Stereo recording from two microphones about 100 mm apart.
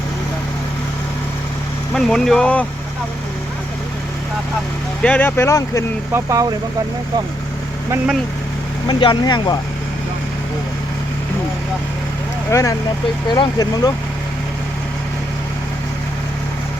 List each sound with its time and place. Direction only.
1.9 s speech: 5° left (ahead or behind)
5.0 s speech: 15° left (ahead or behind)
5.4 s speech: 30° left (ahead or behind)
6.1 s speech: 35° right (ahead or behind)
8.9 s speech: 50° left (ahead or behind)
12.5 s speech: 30° left (ahead or behind)
13.2 s speech: 50° left (ahead or behind)